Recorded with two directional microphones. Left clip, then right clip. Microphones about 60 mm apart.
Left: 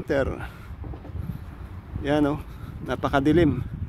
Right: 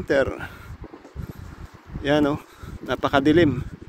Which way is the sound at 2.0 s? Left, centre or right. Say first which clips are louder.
Right 3 dB; centre.